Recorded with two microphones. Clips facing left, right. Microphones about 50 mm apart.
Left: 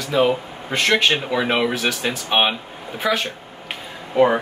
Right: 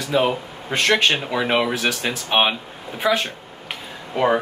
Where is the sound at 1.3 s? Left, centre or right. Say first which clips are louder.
Even; centre.